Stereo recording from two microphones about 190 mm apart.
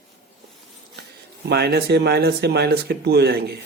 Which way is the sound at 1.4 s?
55° right (ahead or behind).